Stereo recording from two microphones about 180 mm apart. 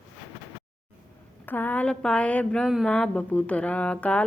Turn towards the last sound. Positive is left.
turn(degrees=5)  # may be behind; listen again after turning